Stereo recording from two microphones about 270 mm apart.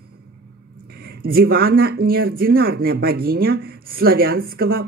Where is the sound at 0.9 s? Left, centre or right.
Right.